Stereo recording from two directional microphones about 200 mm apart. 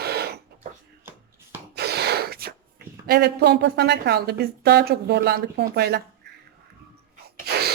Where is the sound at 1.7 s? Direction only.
55° right (ahead or behind).